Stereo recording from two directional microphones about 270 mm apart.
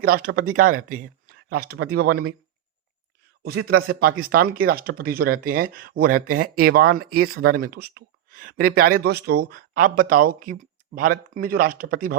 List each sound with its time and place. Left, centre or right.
0.3 s speech: right
0.9 s a sound: right
1.7 s speech: right
2.0 s speech: right
3.4 s speech: right
4.0 s speech: right